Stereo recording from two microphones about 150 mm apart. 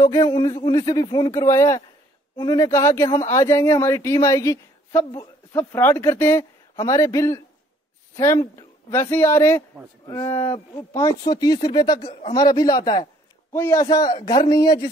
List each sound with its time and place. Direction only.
0.0 s a woman's voice: 20° left (ahead or behind)